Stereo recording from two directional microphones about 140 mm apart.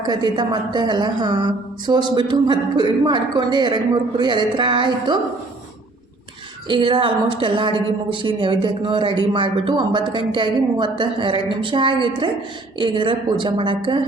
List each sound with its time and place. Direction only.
0.0 s a woman's voice: 30° right (ahead or behind)
6.7 s a woman's voice: 35° right (ahead or behind)